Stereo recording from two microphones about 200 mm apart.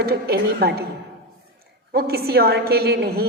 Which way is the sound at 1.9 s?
50° right (ahead or behind).